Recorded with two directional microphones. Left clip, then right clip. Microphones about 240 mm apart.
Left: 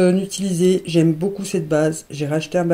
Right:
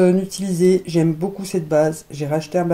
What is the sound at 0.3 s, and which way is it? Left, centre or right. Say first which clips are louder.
Speech: right 1 dB; left.